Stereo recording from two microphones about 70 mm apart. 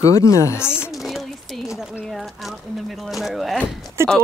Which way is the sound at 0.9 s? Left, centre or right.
Centre.